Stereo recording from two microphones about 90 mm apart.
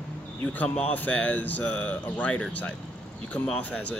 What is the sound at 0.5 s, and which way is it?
Speech, 15° left (ahead or behind).